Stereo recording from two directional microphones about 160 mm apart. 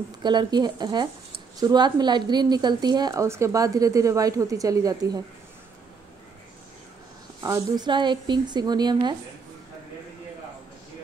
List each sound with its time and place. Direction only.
0.2 s a woman's voice: 25° right (ahead or behind)
7.4 s a woman's voice: 20° right (ahead or behind)